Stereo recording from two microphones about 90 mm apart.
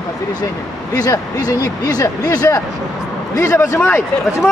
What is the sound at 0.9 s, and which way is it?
A man's voice, 45° left (ahead or behind).